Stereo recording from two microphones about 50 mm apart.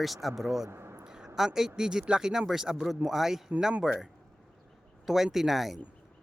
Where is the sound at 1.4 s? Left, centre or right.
Centre.